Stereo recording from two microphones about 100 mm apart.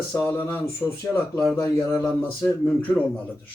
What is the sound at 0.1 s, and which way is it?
A man's voice, 20° left (ahead or behind).